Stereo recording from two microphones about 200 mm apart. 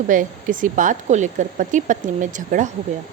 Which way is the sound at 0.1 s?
40° right (ahead or behind).